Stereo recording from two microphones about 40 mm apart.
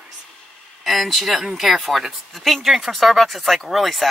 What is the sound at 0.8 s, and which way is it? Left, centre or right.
Speech, centre.